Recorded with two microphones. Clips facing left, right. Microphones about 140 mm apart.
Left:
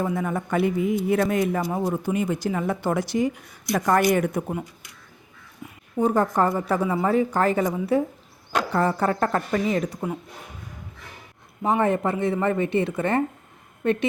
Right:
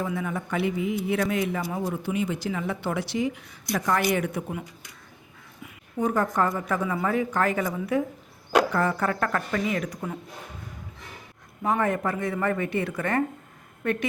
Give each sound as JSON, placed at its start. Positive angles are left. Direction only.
{"t": 0.0, "sound": "speech", "side_deg": 45}
{"t": 6.0, "sound": "a woman's voice", "side_deg": 30}
{"t": 11.6, "sound": "speech", "side_deg": 25}